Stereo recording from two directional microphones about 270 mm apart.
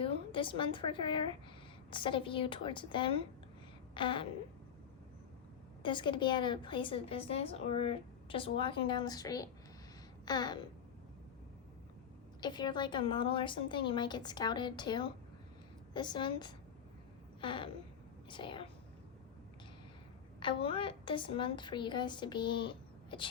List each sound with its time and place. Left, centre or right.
0.0 s a woman's voice: centre
5.8 s a woman's voice: centre
12.4 s a woman's voice: centre
17.4 s a sound: centre
18.3 s speech: centre
20.4 s a woman's voice: centre